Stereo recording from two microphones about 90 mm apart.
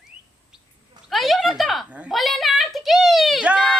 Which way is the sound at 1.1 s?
Centre (ahead or behind).